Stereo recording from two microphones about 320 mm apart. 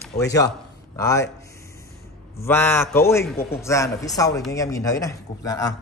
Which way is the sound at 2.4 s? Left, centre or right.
Centre.